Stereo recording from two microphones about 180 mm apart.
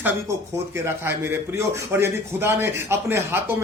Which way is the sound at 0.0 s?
15° right (ahead or behind).